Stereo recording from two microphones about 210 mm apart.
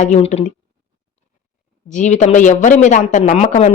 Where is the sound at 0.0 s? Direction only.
35° left (ahead or behind).